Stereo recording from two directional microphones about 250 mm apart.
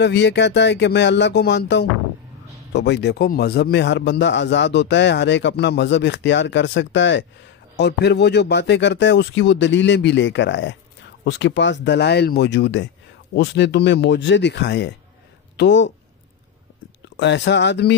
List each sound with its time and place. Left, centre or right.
0.0 s a man's voice: left
17.2 s a man's voice: left